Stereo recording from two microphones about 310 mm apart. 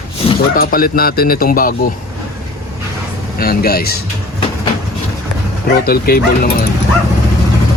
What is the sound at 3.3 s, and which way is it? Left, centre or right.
Speech, left.